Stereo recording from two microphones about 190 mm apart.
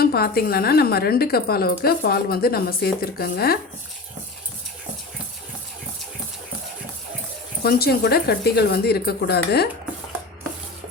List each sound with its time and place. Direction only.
0.0 s a woman's voice: 55° left (ahead or behind)
7.6 s speech: 55° left (ahead or behind)